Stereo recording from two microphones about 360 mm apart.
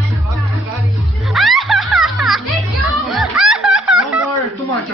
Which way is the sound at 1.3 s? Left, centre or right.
Centre.